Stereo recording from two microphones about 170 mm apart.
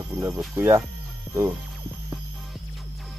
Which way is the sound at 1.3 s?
15° right (ahead or behind).